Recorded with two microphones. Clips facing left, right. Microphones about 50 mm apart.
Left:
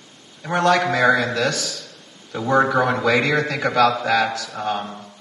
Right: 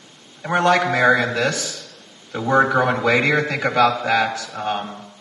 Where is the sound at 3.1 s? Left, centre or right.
Centre.